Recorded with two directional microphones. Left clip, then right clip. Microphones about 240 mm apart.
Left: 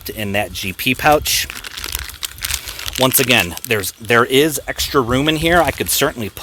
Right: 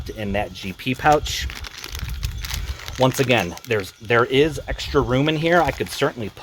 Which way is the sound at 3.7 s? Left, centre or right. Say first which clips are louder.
Left 3 dB; left.